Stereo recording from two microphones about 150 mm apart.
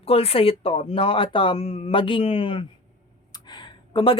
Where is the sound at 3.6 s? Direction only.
35° left (ahead or behind).